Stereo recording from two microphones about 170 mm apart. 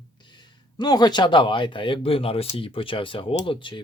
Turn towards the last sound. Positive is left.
turn(degrees=30)  # may be behind; listen again after turning